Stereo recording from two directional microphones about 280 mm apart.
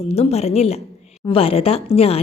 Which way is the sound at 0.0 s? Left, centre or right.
Left.